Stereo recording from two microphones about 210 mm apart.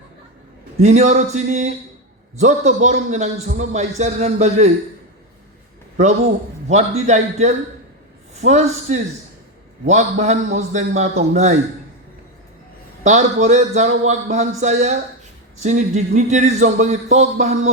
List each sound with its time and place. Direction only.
0.8 s a man's voice: 35° right (ahead or behind)
6.7 s a man's voice: 35° right (ahead or behind)
13.1 s a man's voice: 35° right (ahead or behind)